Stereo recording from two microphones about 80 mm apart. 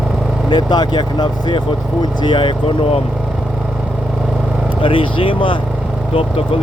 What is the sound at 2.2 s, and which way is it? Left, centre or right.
Speech, left.